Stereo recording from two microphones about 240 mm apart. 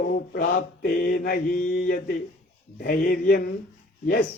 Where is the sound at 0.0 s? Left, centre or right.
Left.